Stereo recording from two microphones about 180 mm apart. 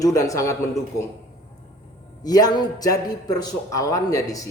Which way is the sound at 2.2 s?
20° left (ahead or behind).